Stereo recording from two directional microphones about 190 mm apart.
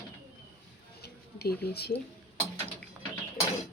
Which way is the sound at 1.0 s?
55° left (ahead or behind).